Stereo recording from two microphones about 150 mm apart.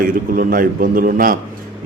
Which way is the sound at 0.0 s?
70° right (ahead or behind).